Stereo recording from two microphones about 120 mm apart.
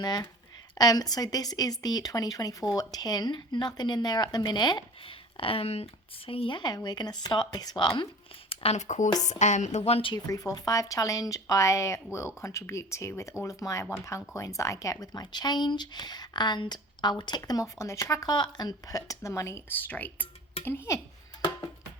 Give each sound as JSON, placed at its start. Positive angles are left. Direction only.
{"t": 0.0, "sound": "speech", "side_deg": 35}
{"t": 6.6, "sound": "speech", "side_deg": 35}
{"t": 8.4, "sound": "speech", "side_deg": 60}
{"t": 10.2, "sound": "speech", "side_deg": 30}